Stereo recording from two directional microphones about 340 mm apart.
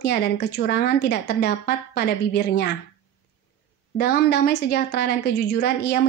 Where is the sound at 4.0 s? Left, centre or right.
Left.